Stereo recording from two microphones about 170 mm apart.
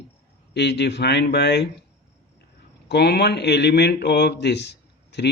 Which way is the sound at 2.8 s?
80° left.